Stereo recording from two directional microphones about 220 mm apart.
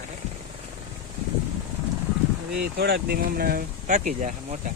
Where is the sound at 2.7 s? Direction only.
45° right (ahead or behind).